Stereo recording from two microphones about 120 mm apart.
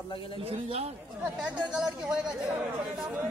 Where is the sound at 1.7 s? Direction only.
5° right (ahead or behind).